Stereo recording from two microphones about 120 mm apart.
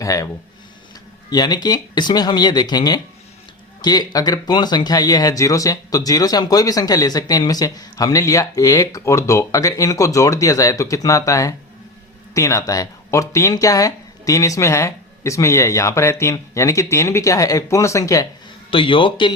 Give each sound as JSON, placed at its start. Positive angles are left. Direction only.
{"t": 0.0, "sound": "speech", "side_deg": 30}
{"t": 1.3, "sound": "speech", "side_deg": 35}
{"t": 18.7, "sound": "a man's voice", "side_deg": 45}